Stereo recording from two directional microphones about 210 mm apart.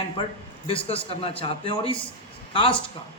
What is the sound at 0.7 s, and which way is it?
A man's voice, 25° left (ahead or behind).